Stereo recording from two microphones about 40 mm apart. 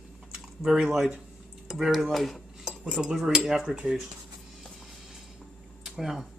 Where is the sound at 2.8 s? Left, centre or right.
Right.